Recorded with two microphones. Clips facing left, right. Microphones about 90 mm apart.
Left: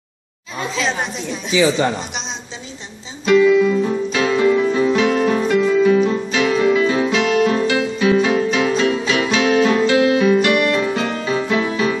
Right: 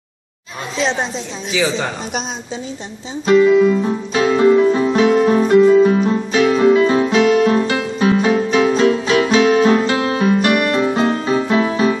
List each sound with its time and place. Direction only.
3.3 s music: 35° right (ahead or behind)